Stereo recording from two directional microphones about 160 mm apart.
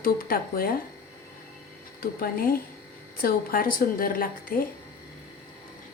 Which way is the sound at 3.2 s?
65° left (ahead or behind).